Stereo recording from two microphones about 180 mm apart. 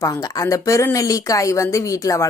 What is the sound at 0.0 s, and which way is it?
A woman's voice, 20° left (ahead or behind).